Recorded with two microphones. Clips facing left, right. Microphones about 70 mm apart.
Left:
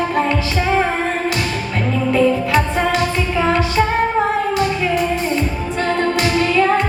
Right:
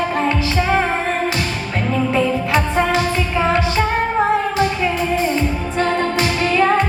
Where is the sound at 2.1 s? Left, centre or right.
Right.